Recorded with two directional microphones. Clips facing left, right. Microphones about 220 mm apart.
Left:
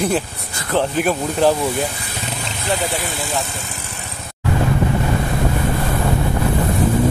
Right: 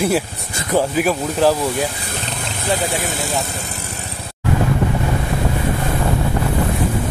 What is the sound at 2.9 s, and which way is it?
Speech, 45° right (ahead or behind).